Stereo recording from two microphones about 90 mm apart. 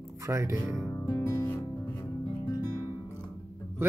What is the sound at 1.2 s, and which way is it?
Music, 40° left (ahead or behind).